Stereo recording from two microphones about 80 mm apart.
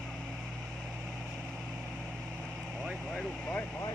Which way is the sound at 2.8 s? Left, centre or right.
Centre.